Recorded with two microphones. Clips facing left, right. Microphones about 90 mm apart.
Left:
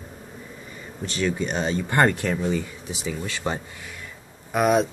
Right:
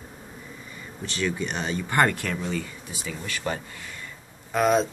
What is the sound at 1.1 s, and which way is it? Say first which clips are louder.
Speech: left 3 dB; 25° left (ahead or behind).